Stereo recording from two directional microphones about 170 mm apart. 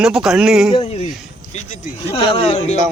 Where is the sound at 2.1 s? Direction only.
35° left (ahead or behind).